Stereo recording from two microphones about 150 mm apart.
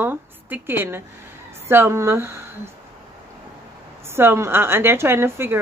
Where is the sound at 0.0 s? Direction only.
15° right (ahead or behind).